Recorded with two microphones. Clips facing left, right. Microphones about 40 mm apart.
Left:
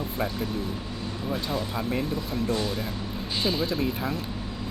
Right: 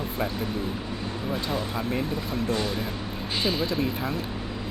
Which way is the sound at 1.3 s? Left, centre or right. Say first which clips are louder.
Even; centre.